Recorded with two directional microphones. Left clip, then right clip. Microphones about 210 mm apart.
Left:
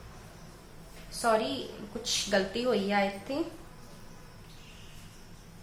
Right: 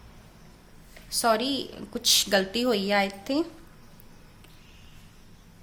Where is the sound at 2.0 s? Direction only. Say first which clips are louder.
Right 6 dB; 50° right (ahead or behind).